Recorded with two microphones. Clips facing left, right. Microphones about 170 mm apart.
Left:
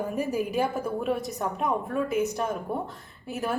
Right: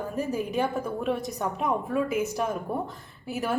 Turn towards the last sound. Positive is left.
turn(degrees=0)  # may be behind; listen again after turning